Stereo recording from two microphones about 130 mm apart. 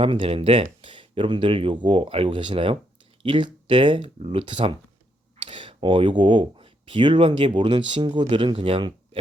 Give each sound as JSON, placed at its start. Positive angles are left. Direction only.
{"t": 0.0, "sound": "speech", "side_deg": -45}